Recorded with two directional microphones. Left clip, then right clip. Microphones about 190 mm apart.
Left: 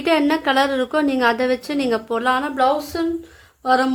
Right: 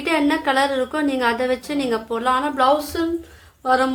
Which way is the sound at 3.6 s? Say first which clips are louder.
Left 1 dB; 40° left (ahead or behind).